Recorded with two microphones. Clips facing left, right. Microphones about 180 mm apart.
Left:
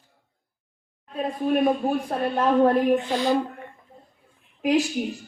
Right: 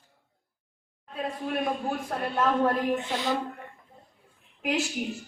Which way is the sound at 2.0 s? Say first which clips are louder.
Left 1 dB; 35° left (ahead or behind).